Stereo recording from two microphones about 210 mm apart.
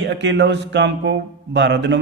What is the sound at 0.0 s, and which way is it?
Speech, 55° right (ahead or behind).